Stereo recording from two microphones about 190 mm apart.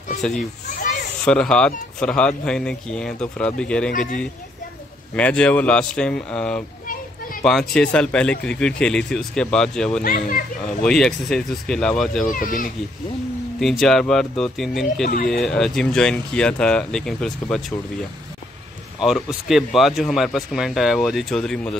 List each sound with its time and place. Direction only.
1.2 s speech: 5° left (ahead or behind)
5.1 s speech: 5° left (ahead or behind)
10.0 s speech: 50° left (ahead or behind)
10.7 s speech: 5° left (ahead or behind)
12.3 s speech: 45° left (ahead or behind)
13.6 s speech: centre (ahead or behind)
18.9 s speech: centre (ahead or behind)